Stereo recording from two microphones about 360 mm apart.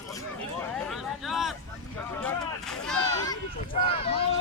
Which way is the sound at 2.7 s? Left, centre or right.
Centre.